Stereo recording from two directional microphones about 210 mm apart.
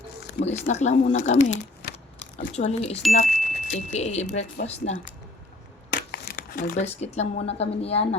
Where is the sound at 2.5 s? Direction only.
30° left (ahead or behind).